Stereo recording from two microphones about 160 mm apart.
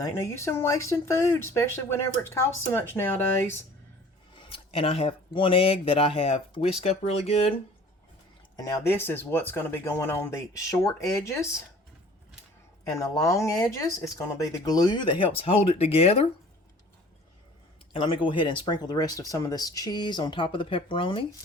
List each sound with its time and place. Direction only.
0.0 s speech: 15° left (ahead or behind)
4.4 s speech: 35° left (ahead or behind)
8.5 s speech: 20° left (ahead or behind)
12.9 s speech: 20° left (ahead or behind); by 16.2 s 40° left (ahead or behind)
17.9 s speech: 30° left (ahead or behind)